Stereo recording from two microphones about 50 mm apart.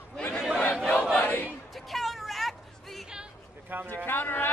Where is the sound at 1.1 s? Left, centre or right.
Left.